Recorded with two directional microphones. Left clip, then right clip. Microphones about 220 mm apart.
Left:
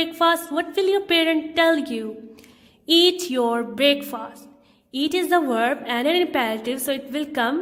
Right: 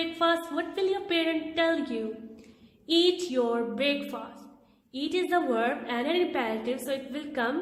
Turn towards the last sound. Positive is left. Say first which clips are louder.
# left 7 dB
turn(degrees=50)  # may be behind; listen again after turning